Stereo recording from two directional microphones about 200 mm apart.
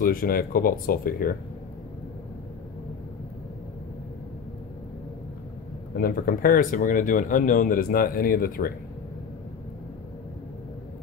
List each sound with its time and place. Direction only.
0.0 s speech: 45° left (ahead or behind)
5.9 s speech: 45° left (ahead or behind)